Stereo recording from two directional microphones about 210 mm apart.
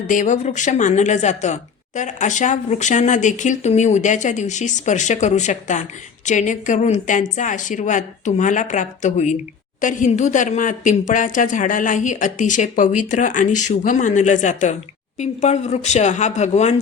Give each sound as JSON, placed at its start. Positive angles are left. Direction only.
{"t": 0.1, "sound": "speech", "side_deg": 35}